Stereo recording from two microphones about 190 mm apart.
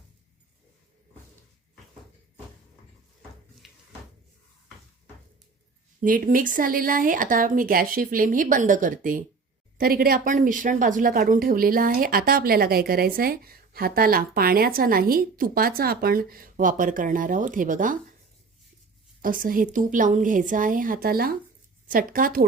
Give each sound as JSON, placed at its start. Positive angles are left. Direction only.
{"t": 3.6, "sound": "a sound", "side_deg": 0}
{"t": 6.0, "sound": "speech", "side_deg": -45}
{"t": 19.2, "sound": "speech", "side_deg": -45}